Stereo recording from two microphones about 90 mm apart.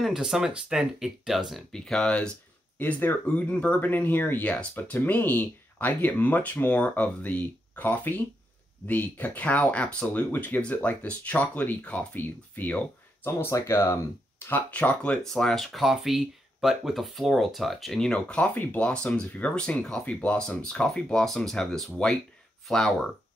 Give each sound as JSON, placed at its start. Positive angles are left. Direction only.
{"t": 0.0, "sound": "speech", "side_deg": -5}
{"t": 15.2, "sound": "speech", "side_deg": 5}